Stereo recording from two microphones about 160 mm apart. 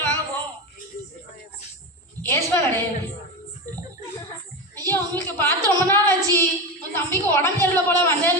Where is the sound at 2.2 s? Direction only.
15° left (ahead or behind).